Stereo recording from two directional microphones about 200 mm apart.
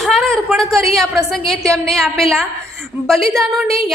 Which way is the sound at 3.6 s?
30° left (ahead or behind).